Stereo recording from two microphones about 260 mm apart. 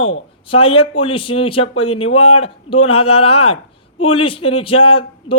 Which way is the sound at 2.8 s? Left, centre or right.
Left.